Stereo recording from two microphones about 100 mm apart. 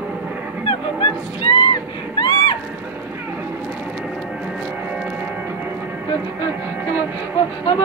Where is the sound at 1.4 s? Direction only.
60° left (ahead or behind).